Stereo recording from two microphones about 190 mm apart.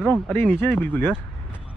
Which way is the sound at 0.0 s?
5° left (ahead or behind).